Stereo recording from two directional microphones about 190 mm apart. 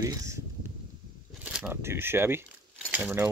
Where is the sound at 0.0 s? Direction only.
15° right (ahead or behind).